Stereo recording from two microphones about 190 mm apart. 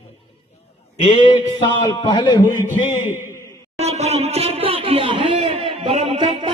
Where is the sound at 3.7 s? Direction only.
35° right (ahead or behind).